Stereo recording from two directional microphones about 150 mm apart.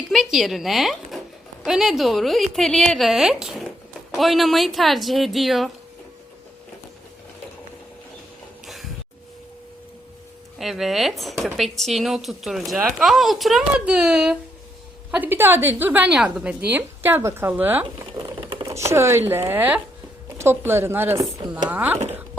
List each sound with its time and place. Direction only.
0.1 s speech: centre (ahead or behind)
8.6 s a sound: centre (ahead or behind)
10.6 s a woman's voice: centre (ahead or behind)
18.2 s typewriter: 30° right (ahead or behind)
18.6 s a woman's voice: 20° right (ahead or behind)